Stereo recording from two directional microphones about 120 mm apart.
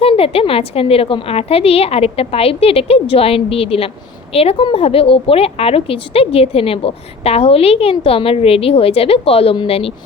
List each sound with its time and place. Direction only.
0.0 s a woman's voice: 50° left (ahead or behind)